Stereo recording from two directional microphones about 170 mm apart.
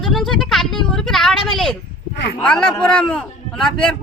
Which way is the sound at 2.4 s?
5° left (ahead or behind).